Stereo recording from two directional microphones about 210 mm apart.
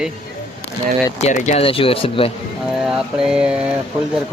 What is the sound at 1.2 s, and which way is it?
Speech, 30° left (ahead or behind).